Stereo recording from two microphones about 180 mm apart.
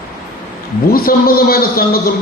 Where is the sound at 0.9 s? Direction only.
55° left (ahead or behind).